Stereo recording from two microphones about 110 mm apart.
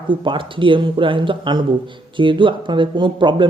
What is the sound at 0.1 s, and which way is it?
Speech, 50° right (ahead or behind).